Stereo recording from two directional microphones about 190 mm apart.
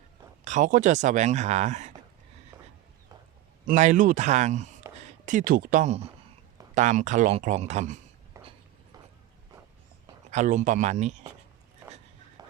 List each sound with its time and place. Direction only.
0.4 s speech: 40° right (ahead or behind)
3.7 s speech: 40° right (ahead or behind)
8.4 s a sound: 15° right (ahead or behind)
10.3 s speech: 40° right (ahead or behind)
12.4 s run: 20° right (ahead or behind)